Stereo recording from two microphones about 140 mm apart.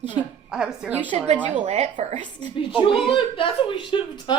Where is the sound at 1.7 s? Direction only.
50° right (ahead or behind).